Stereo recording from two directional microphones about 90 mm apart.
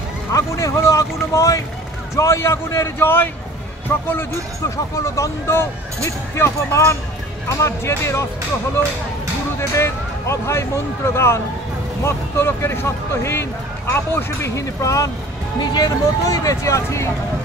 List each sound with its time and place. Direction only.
0.3 s speech: 35° left (ahead or behind)
9.6 s speech: 30° left (ahead or behind)
15.6 s speech: 50° left (ahead or behind); by 17.1 s 35° left (ahead or behind)